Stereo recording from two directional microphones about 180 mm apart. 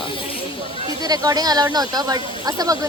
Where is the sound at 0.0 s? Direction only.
30° left (ahead or behind).